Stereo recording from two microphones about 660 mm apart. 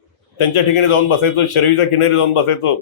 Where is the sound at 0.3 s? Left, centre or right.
Left.